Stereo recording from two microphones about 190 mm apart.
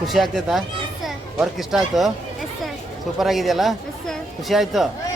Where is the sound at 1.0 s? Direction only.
Centre (ahead or behind).